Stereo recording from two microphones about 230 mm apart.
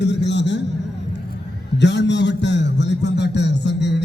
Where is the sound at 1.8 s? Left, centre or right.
Left.